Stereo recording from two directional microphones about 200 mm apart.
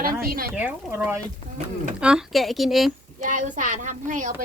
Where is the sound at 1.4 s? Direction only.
30° left (ahead or behind).